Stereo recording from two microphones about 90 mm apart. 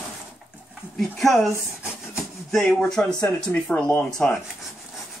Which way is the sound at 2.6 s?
10° left (ahead or behind).